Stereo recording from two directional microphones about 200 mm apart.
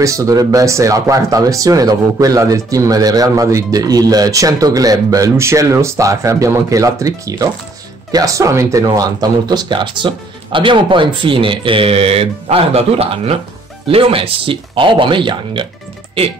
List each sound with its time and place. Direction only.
0.0 s speech: 15° right (ahead or behind)